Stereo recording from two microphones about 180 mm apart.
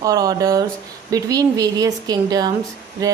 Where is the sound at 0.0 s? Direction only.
20° right (ahead or behind).